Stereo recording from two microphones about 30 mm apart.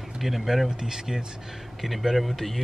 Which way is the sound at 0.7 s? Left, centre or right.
Centre.